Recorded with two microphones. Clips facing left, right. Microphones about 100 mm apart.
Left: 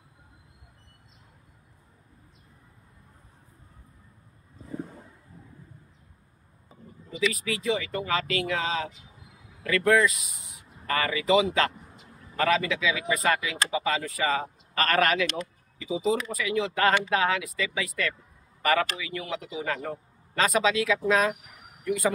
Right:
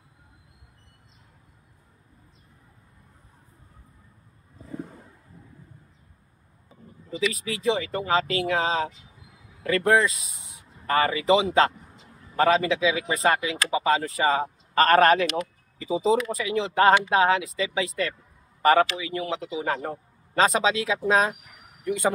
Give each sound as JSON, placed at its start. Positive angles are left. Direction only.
{"t": 7.1, "sound": "speech", "side_deg": -30}